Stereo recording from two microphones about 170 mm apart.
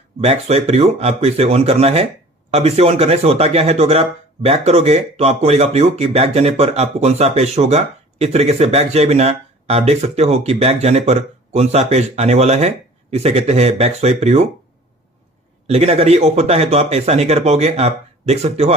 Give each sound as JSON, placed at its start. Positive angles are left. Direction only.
{"t": 0.2, "sound": "speech", "side_deg": -40}
{"t": 15.6, "sound": "speech", "side_deg": -35}